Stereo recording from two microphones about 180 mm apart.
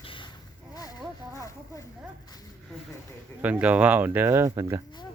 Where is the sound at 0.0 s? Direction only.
30° left (ahead or behind).